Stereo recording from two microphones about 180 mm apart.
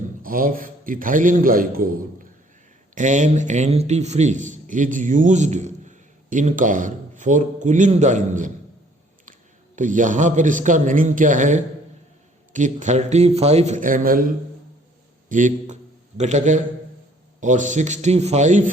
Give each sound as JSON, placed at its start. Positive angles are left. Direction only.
{"t": 0.2, "sound": "a man's voice", "side_deg": -50}
{"t": 2.9, "sound": "a man's voice", "side_deg": -40}
{"t": 9.7, "sound": "a man's voice", "side_deg": -45}
{"t": 15.3, "sound": "a man's voice", "side_deg": -45}